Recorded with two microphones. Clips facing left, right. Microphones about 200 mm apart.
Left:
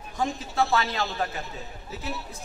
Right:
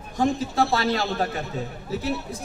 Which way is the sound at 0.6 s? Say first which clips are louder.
Left 1 dB; 40° right (ahead or behind).